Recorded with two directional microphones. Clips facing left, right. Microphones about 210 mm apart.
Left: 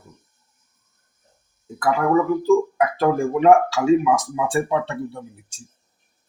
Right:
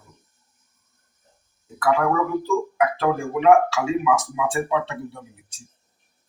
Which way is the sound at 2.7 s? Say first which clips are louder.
Left 2 dB; 40° left (ahead or behind).